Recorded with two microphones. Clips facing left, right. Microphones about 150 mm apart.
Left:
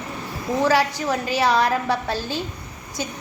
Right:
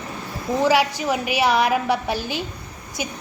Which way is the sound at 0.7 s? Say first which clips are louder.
Right 1 dB; 10° right (ahead or behind).